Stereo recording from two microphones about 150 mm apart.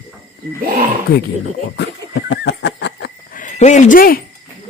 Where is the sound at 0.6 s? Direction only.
70° right (ahead or behind).